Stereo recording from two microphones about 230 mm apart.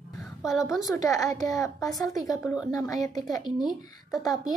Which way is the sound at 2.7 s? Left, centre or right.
Centre.